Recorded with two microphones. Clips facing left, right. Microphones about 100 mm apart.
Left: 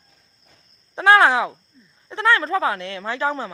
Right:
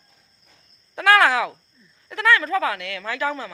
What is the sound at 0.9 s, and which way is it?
Speech, 30° left (ahead or behind).